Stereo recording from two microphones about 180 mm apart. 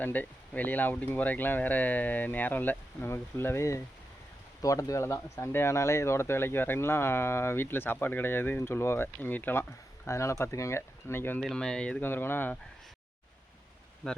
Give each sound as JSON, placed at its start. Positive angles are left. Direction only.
{"t": 0.0, "sound": "speech", "side_deg": 10}